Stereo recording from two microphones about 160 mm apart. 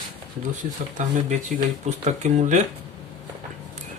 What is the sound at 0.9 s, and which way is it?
Speech, 50° right (ahead or behind).